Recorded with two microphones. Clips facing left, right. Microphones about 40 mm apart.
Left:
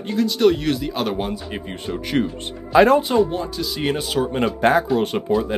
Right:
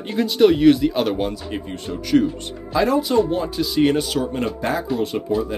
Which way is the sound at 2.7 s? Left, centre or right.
Left.